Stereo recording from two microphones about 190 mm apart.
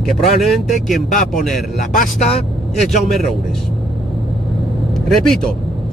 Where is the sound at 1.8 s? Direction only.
40° left (ahead or behind).